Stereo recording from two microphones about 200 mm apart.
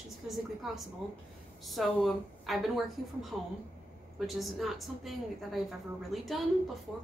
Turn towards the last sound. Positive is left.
turn(degrees=0)  # may be behind; listen again after turning